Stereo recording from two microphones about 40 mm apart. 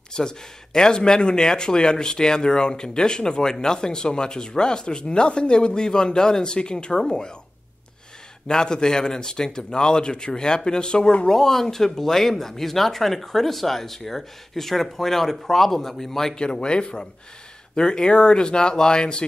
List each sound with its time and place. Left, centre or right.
0.1 s speech: centre
8.5 s speech: centre
11.2 s speech: centre
16.3 s speech: left